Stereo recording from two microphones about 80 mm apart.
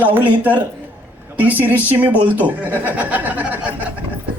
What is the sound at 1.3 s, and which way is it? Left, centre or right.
Speech, right.